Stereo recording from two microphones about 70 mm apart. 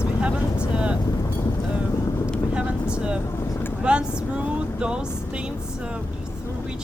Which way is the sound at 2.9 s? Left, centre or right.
Centre.